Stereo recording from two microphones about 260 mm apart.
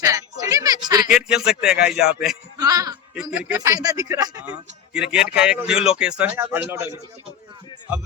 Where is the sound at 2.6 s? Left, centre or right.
Centre.